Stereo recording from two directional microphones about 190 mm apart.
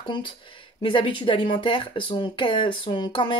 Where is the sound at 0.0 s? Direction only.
25° left (ahead or behind).